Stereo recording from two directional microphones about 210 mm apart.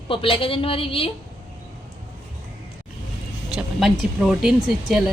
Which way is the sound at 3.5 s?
Centre (ahead or behind).